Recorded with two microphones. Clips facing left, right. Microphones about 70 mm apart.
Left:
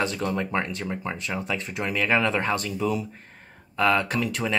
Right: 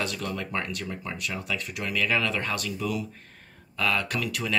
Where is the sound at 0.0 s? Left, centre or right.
Left.